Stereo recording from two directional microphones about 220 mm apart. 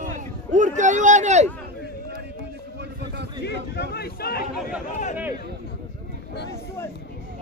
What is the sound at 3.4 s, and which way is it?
Speech, 50° left (ahead or behind).